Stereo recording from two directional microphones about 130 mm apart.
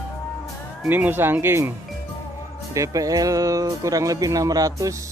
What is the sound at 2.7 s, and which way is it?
Speech, 25° right (ahead or behind).